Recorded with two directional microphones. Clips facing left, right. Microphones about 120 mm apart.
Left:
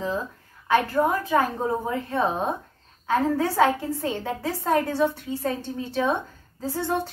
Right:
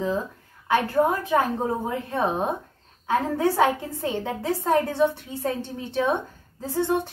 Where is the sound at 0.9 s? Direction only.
20° right (ahead or behind).